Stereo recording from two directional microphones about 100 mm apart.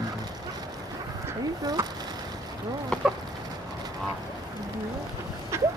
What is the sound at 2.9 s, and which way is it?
Chicken, 10° left (ahead or behind).